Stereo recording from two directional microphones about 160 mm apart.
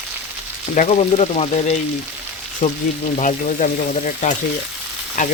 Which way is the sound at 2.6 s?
45° left (ahead or behind).